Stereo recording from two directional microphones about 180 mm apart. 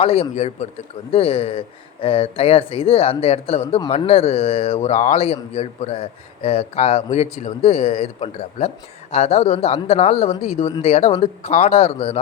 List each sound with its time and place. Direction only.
0.0 s speech: 35° left (ahead or behind)